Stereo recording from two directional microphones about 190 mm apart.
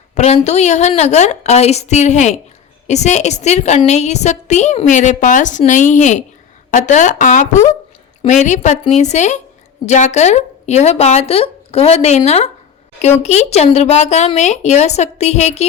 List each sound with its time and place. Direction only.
0.1 s a woman's voice: 35° left (ahead or behind)